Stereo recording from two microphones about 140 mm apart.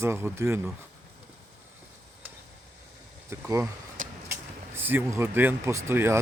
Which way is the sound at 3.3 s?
20° right (ahead or behind).